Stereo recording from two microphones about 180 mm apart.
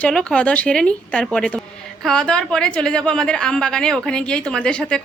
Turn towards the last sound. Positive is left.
turn(degrees=5)  # may be behind; listen again after turning